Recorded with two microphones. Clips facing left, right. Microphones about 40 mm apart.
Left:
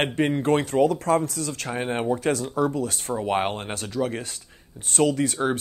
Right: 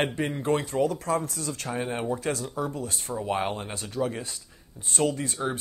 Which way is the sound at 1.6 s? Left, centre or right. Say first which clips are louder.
Left 3 dB; left.